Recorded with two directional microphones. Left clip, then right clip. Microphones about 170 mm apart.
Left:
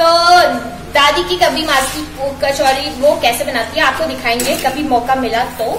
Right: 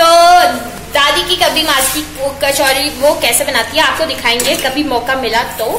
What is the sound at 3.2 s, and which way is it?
A woman's voice, 10° right (ahead or behind).